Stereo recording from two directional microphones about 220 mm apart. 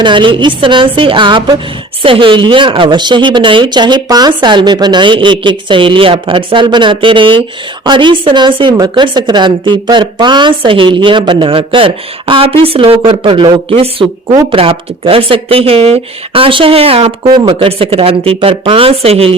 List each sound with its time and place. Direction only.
0.0 s speech: 20° right (ahead or behind)